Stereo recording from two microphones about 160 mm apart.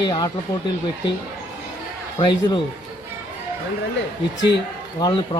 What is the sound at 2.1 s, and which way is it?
Speech, 30° left (ahead or behind).